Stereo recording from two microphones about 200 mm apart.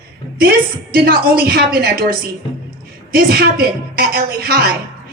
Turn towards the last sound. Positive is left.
turn(degrees=-50)  # may be behind; listen again after turning